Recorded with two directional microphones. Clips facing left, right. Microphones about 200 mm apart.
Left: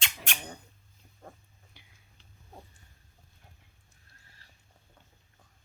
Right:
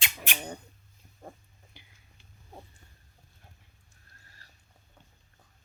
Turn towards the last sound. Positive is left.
turn(degrees=-40)  # may be behind; listen again after turning